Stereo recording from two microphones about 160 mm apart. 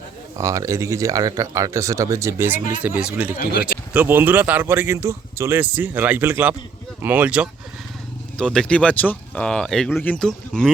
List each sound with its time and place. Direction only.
0.3 s speech: 20° right (ahead or behind)
3.3 s speech: 75° left (ahead or behind)
3.9 s speech: 10° right (ahead or behind)
8.4 s speech: 5° left (ahead or behind)